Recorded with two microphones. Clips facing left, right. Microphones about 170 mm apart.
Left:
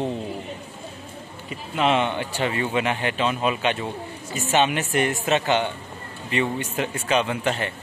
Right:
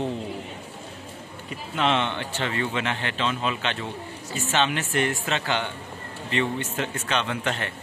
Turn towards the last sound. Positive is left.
turn(degrees=5)  # may be behind; listen again after turning